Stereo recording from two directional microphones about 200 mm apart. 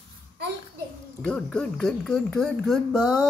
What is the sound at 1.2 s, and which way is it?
Speech, 5° left (ahead or behind).